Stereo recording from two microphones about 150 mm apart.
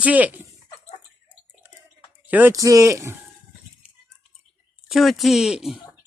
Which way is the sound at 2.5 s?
20° right (ahead or behind).